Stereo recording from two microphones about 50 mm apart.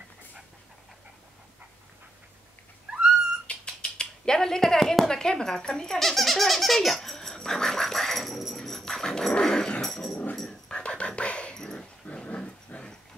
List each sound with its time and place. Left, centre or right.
3.4 s speech: centre
10.3 s dog: centre
10.7 s dog: left
12.7 s dog: left